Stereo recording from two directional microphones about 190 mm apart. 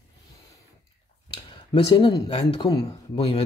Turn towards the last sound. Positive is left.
turn(degrees=30)  # may be behind; listen again after turning